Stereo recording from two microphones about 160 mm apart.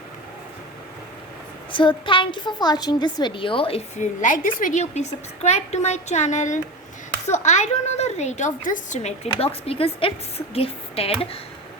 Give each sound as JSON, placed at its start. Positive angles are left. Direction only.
{"t": 1.7, "sound": "a woman's voice", "side_deg": 30}
{"t": 3.9, "sound": "a woman's voice", "side_deg": 50}